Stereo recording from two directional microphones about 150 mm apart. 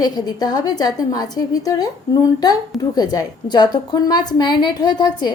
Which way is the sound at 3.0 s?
25° left (ahead or behind).